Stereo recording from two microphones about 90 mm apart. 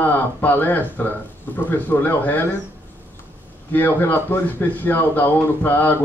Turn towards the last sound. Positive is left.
turn(degrees=20)  # may be behind; listen again after turning